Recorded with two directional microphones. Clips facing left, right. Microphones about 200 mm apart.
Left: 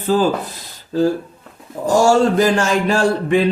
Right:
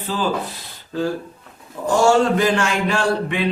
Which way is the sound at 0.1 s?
45° left (ahead or behind).